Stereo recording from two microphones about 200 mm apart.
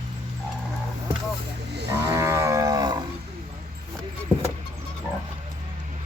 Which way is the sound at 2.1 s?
15° right (ahead or behind).